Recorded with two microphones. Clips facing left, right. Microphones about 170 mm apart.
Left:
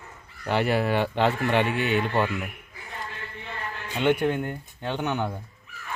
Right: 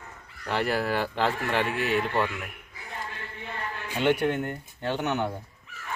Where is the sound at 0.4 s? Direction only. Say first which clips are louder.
Left 3 dB; centre (ahead or behind).